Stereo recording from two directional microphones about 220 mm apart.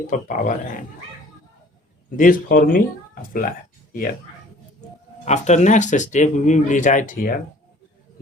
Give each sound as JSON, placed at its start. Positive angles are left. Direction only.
{"t": 0.1, "sound": "speech", "side_deg": 35}
{"t": 2.0, "sound": "speech", "side_deg": 35}
{"t": 5.2, "sound": "speech", "side_deg": 30}